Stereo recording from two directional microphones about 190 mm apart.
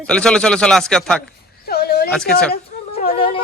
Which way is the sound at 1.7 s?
55° left (ahead or behind).